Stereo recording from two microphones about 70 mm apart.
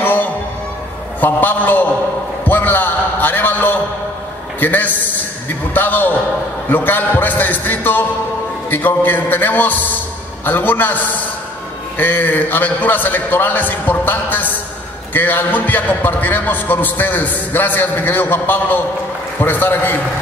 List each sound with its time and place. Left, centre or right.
0.0 s music: left
1.2 s a man's voice: left